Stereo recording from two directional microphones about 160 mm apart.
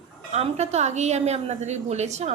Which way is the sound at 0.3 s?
45° right (ahead or behind).